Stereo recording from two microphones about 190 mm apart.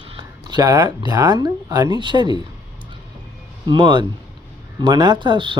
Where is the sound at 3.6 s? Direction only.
25° right (ahead or behind).